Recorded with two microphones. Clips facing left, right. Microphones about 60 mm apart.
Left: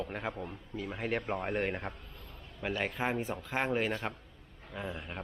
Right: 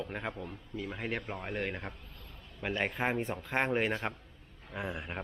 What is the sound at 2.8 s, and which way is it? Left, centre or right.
A man's voice, centre.